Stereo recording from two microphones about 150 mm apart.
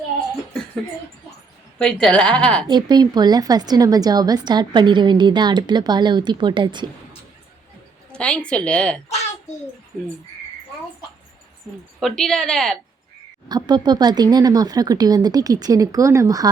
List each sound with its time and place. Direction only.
1.8 s a woman's voice: 5° left (ahead or behind)
2.6 s a woman's voice: 30° right (ahead or behind)
8.1 s a woman's voice: 5° left (ahead or behind)
11.9 s a woman's voice: centre (ahead or behind)
13.5 s a woman's voice: 30° right (ahead or behind)